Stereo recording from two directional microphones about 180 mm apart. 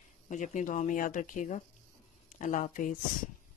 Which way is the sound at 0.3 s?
45° left (ahead or behind).